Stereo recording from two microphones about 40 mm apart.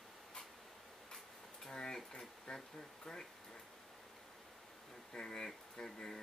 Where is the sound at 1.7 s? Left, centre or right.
Centre.